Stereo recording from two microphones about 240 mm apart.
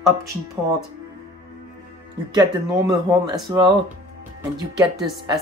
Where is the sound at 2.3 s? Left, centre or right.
Centre.